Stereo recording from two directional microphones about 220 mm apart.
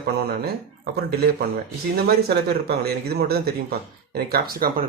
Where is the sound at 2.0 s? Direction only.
45° right (ahead or behind).